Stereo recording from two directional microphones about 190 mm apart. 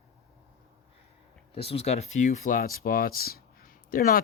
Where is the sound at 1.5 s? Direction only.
30° left (ahead or behind); by 4.2 s 50° left (ahead or behind).